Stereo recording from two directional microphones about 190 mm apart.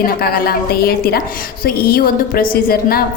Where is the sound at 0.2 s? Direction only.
55° left (ahead or behind).